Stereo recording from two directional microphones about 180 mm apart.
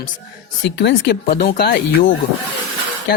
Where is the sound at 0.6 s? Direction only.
75° left (ahead or behind).